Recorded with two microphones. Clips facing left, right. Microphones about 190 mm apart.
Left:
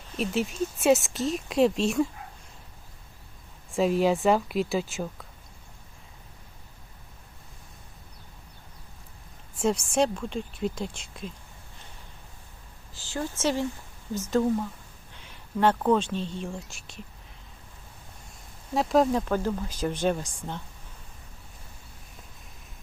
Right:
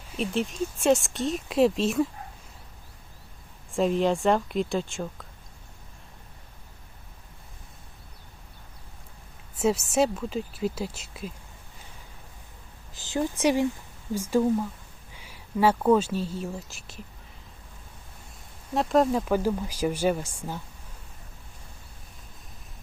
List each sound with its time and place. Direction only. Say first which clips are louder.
0.2 s speech: even; centre (ahead or behind)
3.7 s speech: even; centre (ahead or behind)
9.6 s speech: right 1 dB; 5° right (ahead or behind)
12.9 s speech: right 5 dB; 20° right (ahead or behind); by 17.0 s centre (ahead or behind)
18.7 s speech: even; centre (ahead or behind)